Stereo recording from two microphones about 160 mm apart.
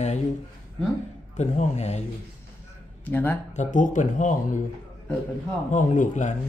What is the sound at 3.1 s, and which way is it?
Speech, 10° left (ahead or behind).